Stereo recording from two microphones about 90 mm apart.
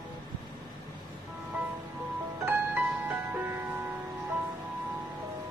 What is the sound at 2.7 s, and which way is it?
Music, 20° right (ahead or behind).